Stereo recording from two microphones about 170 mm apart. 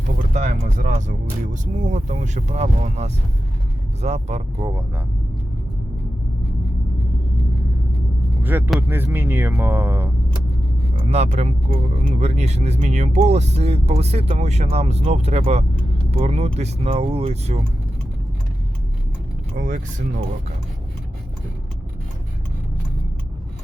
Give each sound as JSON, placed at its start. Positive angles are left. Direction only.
{"t": 0.2, "sound": "speech", "side_deg": -40}
{"t": 8.4, "sound": "speech", "side_deg": -10}
{"t": 11.0, "sound": "speech", "side_deg": -40}
{"t": 19.5, "sound": "speech", "side_deg": -45}